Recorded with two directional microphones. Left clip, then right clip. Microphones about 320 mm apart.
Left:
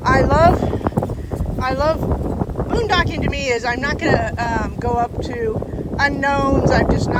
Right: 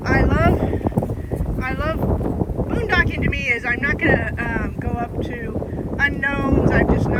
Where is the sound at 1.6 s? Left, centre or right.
Centre.